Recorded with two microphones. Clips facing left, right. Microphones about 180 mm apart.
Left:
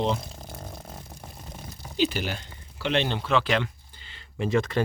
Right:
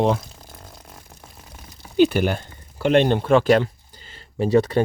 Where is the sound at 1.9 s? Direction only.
55° right (ahead or behind).